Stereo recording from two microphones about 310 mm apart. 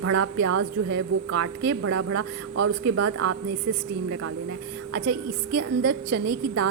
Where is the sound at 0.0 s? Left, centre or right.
Right.